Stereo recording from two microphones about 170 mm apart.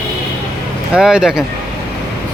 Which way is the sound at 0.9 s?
5° right (ahead or behind).